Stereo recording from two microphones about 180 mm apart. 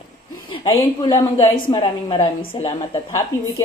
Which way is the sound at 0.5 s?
25° left (ahead or behind).